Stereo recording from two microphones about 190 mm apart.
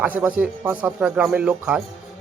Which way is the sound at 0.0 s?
10° right (ahead or behind).